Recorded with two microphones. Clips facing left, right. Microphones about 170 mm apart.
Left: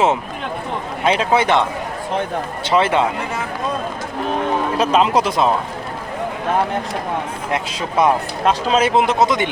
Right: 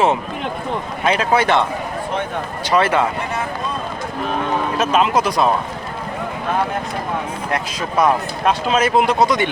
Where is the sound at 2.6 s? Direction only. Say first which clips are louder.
Even; 25° left (ahead or behind).